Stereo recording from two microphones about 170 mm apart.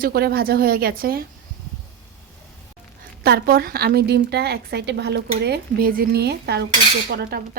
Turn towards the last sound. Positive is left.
turn(degrees=-65)  # may be behind; listen again after turning